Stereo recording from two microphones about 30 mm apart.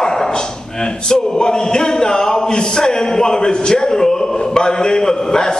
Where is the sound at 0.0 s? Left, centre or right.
Centre.